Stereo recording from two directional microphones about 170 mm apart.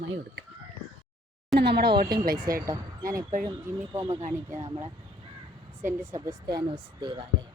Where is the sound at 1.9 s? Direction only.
65° right (ahead or behind).